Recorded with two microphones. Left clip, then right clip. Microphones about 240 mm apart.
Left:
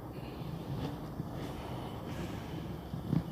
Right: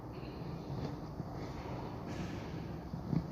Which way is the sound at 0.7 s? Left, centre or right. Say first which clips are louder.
Left 3 dB; left.